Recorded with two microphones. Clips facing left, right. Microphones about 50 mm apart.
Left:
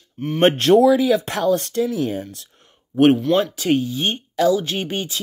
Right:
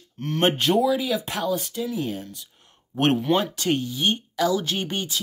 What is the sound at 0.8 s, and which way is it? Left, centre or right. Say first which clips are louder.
Speech: left 7 dB; left.